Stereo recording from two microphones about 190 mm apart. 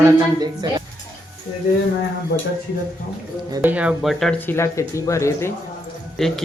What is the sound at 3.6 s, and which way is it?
Speech, 5° right (ahead or behind).